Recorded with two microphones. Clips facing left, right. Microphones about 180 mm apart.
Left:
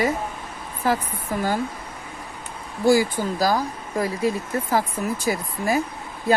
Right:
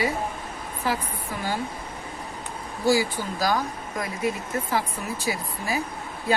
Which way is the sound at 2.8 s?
50° left (ahead or behind).